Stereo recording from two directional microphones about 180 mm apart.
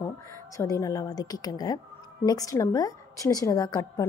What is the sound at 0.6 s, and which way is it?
A woman's voice, 15° left (ahead or behind).